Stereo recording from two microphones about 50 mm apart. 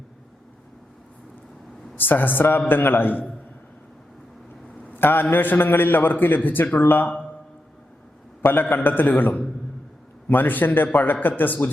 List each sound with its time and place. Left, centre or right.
2.0 s a man's voice: left
4.8 s a man's voice: left
8.4 s a man's voice: left